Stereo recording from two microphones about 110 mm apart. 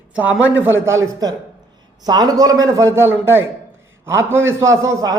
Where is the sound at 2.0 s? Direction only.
35° right (ahead or behind).